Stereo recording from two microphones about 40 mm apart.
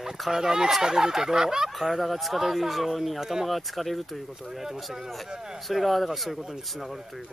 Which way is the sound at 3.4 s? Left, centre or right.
Centre.